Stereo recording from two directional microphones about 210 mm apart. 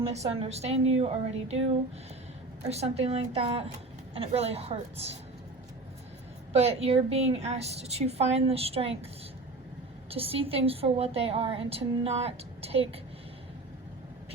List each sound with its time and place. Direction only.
0.1 s a woman's voice: 30° right (ahead or behind)
2.6 s a woman's voice: 30° right (ahead or behind)
6.5 s a woman's voice: 30° right (ahead or behind)
10.1 s a woman's voice: 25° right (ahead or behind)